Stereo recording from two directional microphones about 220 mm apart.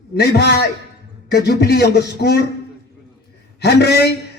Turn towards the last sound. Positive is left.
turn(degrees=50)  # may be behind; listen again after turning